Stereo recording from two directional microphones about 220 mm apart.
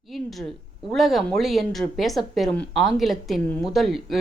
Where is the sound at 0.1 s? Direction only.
Centre (ahead or behind).